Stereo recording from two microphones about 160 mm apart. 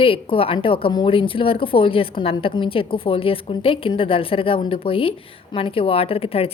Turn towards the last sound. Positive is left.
turn(degrees=35)  # may be behind; listen again after turning